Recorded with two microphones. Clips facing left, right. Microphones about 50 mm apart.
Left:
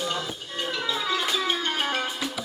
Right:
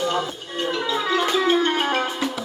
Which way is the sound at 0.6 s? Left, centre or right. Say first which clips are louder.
Right 5 dB; centre.